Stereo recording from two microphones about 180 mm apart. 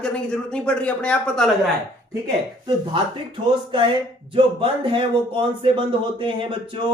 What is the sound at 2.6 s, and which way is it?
Speech, 25° right (ahead or behind).